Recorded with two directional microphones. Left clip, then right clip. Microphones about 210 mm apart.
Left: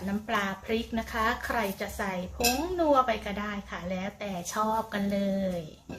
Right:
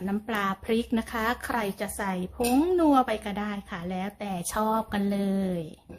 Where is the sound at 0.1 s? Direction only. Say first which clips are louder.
Right 1 dB; 50° right (ahead or behind).